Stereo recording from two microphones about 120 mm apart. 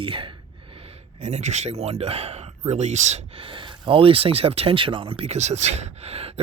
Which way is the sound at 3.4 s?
45° right (ahead or behind).